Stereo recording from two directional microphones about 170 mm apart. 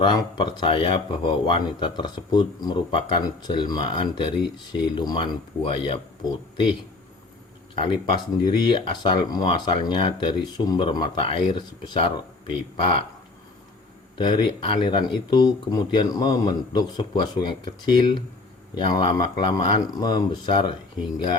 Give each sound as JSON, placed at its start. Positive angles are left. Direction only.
{"t": 0.0, "sound": "speech", "side_deg": 25}
{"t": 7.8, "sound": "speech", "side_deg": 30}
{"t": 14.2, "sound": "speech", "side_deg": 25}